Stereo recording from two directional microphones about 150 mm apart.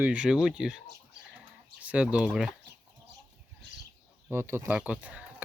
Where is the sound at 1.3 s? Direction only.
10° right (ahead or behind).